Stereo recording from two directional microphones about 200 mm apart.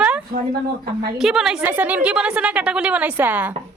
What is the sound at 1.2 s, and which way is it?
A woman's voice, centre (ahead or behind).